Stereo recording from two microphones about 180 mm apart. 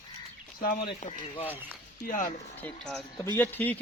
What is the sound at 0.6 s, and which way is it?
Speech, 50° left (ahead or behind).